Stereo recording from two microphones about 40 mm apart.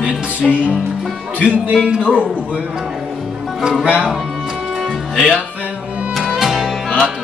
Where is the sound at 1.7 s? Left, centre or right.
Right.